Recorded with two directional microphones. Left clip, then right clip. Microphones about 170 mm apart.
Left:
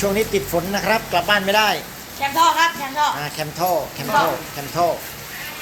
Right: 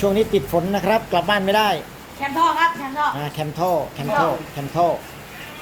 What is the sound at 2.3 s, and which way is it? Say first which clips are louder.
Speech: left 1 dB; 45° left (ahead or behind).